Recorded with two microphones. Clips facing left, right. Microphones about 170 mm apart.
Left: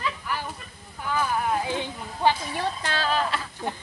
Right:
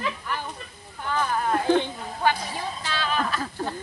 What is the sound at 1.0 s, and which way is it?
Speech, 5° left (ahead or behind).